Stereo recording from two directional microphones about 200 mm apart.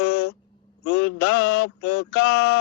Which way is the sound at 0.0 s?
60° left (ahead or behind).